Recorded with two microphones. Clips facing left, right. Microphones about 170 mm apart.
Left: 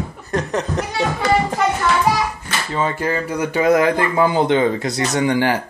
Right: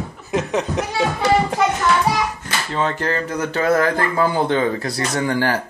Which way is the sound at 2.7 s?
10° left (ahead or behind).